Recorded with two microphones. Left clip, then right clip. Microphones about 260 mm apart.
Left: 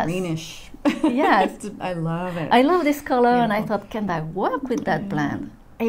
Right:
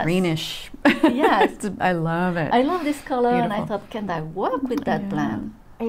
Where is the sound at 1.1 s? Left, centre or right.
Left.